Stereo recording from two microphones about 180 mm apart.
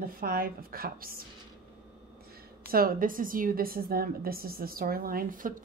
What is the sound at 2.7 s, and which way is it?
A woman's voice, 55° right (ahead or behind).